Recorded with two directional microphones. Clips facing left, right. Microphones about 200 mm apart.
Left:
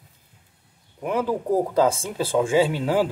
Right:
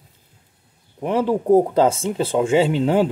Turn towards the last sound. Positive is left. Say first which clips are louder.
# right 3 dB
turn(degrees=-25)  # may be behind; listen again after turning